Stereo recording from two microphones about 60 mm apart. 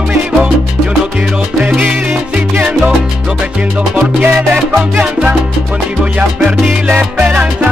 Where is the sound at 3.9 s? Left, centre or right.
Right.